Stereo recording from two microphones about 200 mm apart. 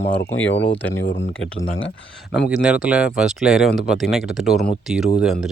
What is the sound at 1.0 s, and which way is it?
Speech, 60° left (ahead or behind).